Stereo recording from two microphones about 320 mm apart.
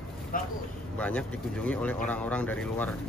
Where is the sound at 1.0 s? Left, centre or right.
Centre.